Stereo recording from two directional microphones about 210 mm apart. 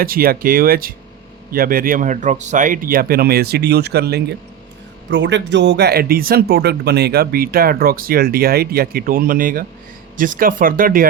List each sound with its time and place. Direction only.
0.0 s speech: 45° right (ahead or behind)